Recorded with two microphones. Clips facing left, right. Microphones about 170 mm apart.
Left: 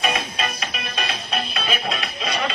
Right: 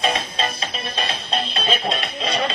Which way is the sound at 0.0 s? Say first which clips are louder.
Right 1 dB; 25° right (ahead or behind).